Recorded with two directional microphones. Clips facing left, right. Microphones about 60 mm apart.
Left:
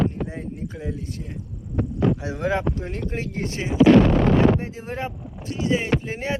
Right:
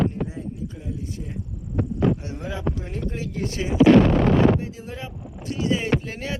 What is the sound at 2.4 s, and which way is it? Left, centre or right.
Speech, left.